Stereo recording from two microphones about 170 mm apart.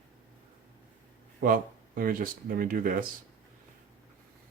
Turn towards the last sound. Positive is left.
turn(degrees=-55)  # may be behind; listen again after turning